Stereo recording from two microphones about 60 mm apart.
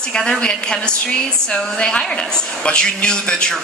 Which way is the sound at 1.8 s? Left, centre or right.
Centre.